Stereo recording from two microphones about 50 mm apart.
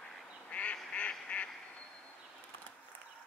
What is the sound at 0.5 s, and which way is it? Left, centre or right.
Duck, left.